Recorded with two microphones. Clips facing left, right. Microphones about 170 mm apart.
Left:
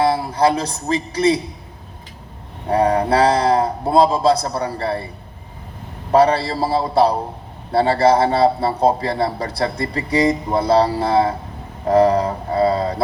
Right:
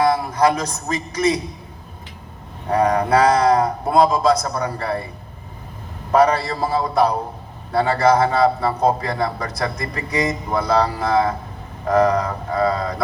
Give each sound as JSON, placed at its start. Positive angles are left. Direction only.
{"t": 0.0, "sound": "a man's voice", "side_deg": 30}
{"t": 2.6, "sound": "a man's voice", "side_deg": 30}
{"t": 6.1, "sound": "a man's voice", "side_deg": 30}